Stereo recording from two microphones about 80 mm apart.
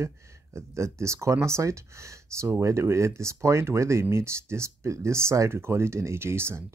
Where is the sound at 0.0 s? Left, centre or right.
Right.